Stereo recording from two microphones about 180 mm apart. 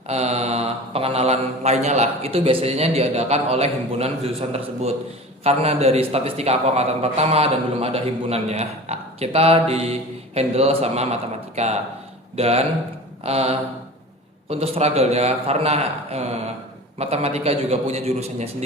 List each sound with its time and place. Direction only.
0.1 s a man's voice: 35° right (ahead or behind)